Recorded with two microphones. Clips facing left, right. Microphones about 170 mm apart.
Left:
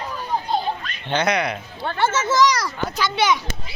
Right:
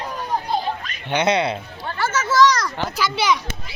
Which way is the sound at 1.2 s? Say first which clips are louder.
Right 4 dB; 30° right (ahead or behind).